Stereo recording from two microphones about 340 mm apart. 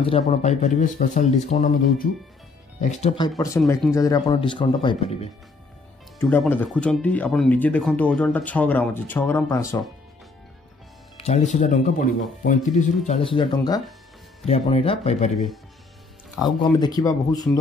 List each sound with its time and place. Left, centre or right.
0.0 s speech: centre
6.1 s speech: centre
11.1 s speech: centre
15.3 s speech: centre
16.6 s speech: centre